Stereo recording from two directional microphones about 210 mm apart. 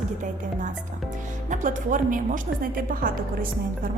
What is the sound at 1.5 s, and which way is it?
A woman's voice, 40° right (ahead or behind).